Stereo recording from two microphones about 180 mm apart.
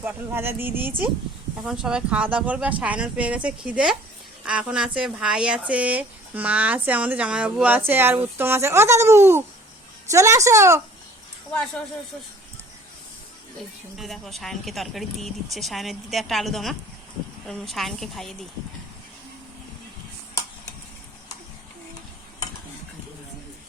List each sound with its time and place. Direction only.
0.0 s speech: 10° right (ahead or behind)
13.9 s speech: centre (ahead or behind)